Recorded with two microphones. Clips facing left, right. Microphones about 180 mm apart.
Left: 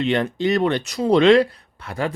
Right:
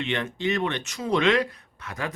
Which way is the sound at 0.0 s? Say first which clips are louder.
Left 7 dB; 35° left (ahead or behind).